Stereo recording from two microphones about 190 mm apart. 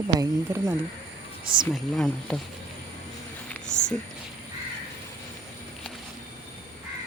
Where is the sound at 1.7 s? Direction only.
Centre (ahead or behind).